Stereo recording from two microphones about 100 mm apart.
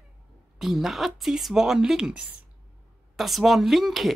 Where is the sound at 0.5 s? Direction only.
5° right (ahead or behind).